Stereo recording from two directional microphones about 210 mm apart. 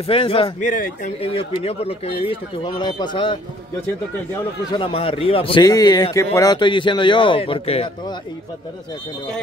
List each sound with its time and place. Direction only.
0.0 s a man's voice: 25° left (ahead or behind)
4.7 s a man's voice: 25° left (ahead or behind)